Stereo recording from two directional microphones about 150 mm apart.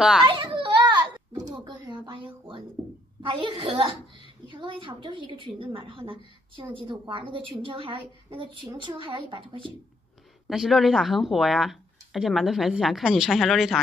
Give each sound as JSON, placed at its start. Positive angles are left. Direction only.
{"t": 0.3, "sound": "a sound", "side_deg": -35}
{"t": 3.2, "sound": "a woman's voice", "side_deg": -35}
{"t": 10.5, "sound": "speech", "side_deg": 0}